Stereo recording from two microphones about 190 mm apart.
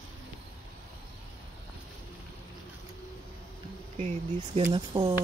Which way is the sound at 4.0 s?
30° right (ahead or behind).